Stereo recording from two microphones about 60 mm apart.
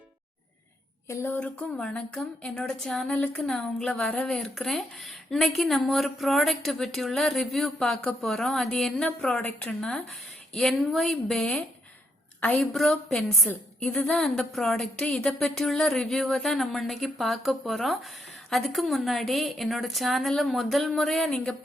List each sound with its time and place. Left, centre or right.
1.0 s a sound: left
1.4 s a woman's voice: left
10.5 s speech: centre